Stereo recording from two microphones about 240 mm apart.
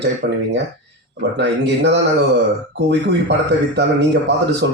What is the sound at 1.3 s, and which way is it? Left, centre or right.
Speech, right.